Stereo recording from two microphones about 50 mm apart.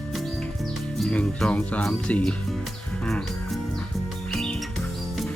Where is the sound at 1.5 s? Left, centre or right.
Left.